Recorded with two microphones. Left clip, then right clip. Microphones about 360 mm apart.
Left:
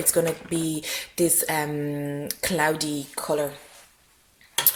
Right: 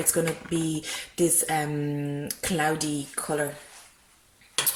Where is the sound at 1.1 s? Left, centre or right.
Centre.